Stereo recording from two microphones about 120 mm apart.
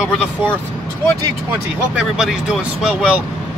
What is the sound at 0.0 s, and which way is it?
Speech, 5° right (ahead or behind).